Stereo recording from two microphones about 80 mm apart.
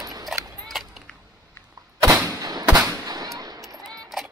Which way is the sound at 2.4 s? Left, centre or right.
Right.